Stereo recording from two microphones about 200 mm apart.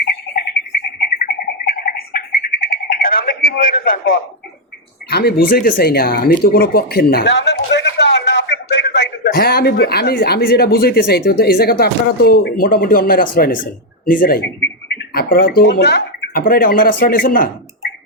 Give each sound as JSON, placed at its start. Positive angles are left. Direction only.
{"t": 1.2, "sound": "bird", "side_deg": 45}
{"t": 5.0, "sound": "speech", "side_deg": 50}